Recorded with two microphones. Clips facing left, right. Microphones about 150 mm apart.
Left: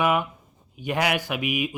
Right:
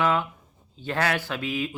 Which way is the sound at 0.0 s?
15° left (ahead or behind).